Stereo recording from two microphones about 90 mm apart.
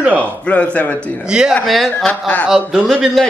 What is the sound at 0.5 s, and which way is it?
Speech, 15° left (ahead or behind).